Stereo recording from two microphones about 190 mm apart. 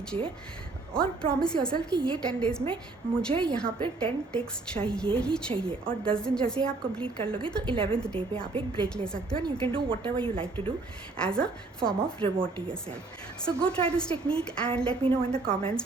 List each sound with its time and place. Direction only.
0.9 s a woman's voice: 5° left (ahead or behind)
7.7 s speech: 30° right (ahead or behind)
7.9 s a woman's voice: 5° left (ahead or behind)
8.5 s speech: 25° right (ahead or behind)
9.0 s a woman's voice: 5° left (ahead or behind)
9.3 s speech: 25° right (ahead or behind)
11.2 s a woman's voice: 5° left (ahead or behind)